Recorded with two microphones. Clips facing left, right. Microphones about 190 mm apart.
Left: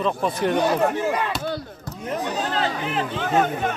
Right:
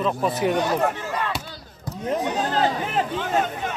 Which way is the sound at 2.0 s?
40° right (ahead or behind).